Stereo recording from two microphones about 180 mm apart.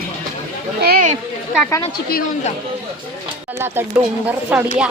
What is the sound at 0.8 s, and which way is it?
Speech, 60° right (ahead or behind).